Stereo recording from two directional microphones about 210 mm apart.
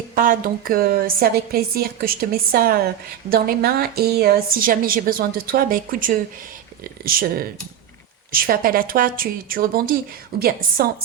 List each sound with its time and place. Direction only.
0.2 s a woman's voice: 40° right (ahead or behind)